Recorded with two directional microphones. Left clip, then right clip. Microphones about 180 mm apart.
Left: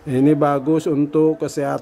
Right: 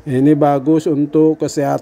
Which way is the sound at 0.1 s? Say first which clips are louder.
Right 3 dB; 15° right (ahead or behind).